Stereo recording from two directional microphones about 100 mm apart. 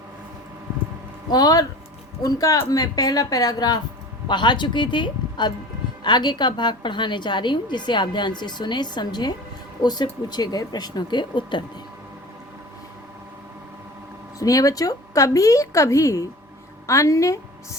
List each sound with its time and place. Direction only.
1.3 s a woman's voice: 40° left (ahead or behind)
14.3 s a woman's voice: 35° left (ahead or behind)